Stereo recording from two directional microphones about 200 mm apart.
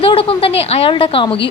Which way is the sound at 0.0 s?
25° left (ahead or behind).